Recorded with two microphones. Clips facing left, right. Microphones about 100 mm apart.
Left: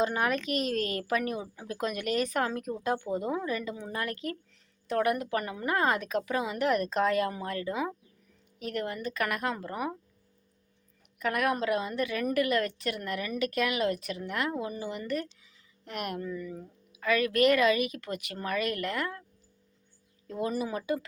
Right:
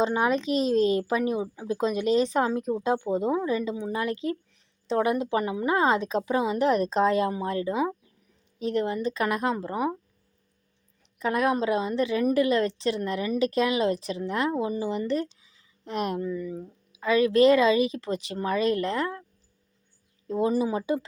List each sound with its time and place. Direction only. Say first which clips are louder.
0.0 s a woman's voice: right 4 dB; 25° right (ahead or behind)
11.2 s a woman's voice: right 4 dB; 25° right (ahead or behind)
20.2 s a woman's voice: right 7 dB; 30° right (ahead or behind)